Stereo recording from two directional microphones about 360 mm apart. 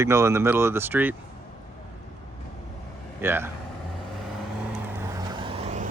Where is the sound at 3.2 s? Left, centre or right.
Centre.